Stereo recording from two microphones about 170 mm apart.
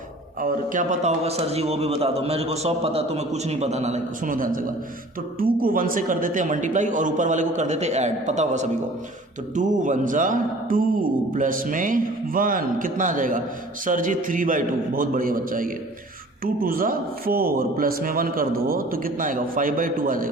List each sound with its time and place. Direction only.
0.4 s a man's voice: 50° right (ahead or behind)